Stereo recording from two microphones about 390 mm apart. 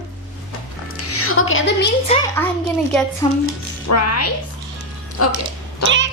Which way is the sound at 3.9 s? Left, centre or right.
Left.